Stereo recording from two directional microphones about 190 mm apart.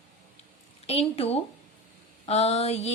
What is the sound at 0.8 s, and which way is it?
A woman's voice, 30° left (ahead or behind).